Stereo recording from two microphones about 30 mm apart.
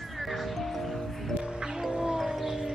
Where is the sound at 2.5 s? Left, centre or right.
Centre.